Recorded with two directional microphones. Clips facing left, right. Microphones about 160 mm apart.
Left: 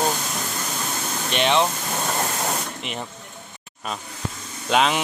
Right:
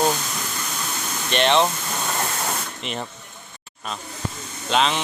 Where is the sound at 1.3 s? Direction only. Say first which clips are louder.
Right 2 dB; 5° left (ahead or behind).